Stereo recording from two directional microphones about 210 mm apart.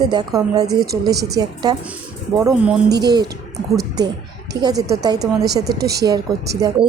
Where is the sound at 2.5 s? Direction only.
5° right (ahead or behind).